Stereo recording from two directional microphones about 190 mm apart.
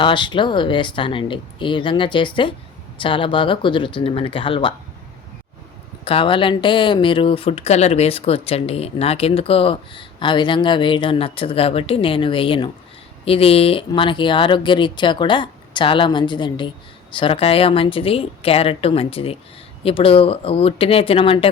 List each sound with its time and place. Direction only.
0.0 s speech: 25° left (ahead or behind)
6.1 s speech: 30° left (ahead or behind)